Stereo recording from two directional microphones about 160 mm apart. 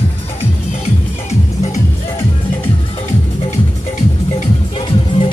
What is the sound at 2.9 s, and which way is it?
Music, 40° left (ahead or behind).